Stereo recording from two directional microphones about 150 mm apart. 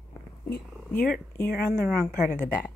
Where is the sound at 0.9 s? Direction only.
10° left (ahead or behind).